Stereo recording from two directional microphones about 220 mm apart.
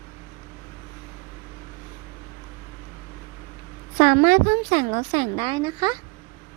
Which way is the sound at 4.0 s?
40° right (ahead or behind).